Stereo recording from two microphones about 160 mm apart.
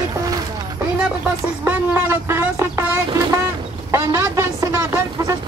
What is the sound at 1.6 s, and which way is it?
Speech, 15° right (ahead or behind).